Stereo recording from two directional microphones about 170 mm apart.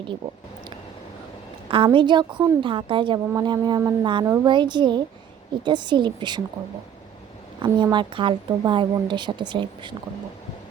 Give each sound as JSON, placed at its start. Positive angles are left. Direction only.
{"t": 1.7, "sound": "a woman's voice", "side_deg": -30}
{"t": 7.6, "sound": "a woman's voice", "side_deg": -25}